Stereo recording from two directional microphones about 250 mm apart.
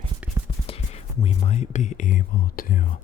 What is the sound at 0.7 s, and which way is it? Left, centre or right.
Speech, left.